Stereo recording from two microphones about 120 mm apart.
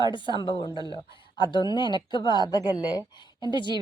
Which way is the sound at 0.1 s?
40° left (ahead or behind).